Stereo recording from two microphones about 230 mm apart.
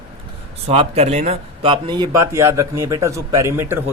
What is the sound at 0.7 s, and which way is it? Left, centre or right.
Speech, right.